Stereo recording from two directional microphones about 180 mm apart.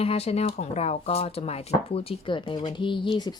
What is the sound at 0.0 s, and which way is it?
Speech, 35° left (ahead or behind).